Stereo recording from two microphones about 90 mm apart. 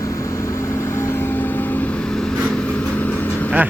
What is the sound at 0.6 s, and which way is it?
Vehicle, 30° left (ahead or behind).